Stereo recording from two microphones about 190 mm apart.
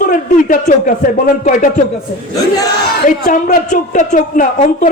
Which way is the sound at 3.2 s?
40° left (ahead or behind).